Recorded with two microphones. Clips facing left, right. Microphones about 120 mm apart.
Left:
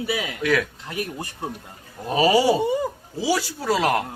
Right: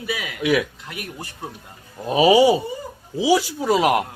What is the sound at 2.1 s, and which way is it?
Speech, 15° right (ahead or behind).